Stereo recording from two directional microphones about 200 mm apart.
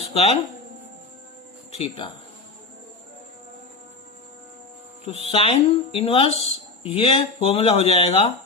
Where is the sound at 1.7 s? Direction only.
30° left (ahead or behind).